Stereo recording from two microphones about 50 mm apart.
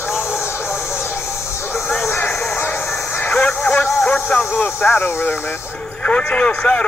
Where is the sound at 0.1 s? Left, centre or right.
Left.